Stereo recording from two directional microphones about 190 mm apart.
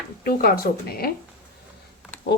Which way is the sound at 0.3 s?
50° left (ahead or behind).